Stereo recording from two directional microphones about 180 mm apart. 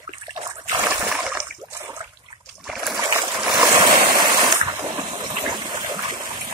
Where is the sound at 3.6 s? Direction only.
20° right (ahead or behind).